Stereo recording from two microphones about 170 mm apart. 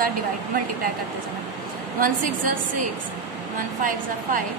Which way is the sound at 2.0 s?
55° right (ahead or behind).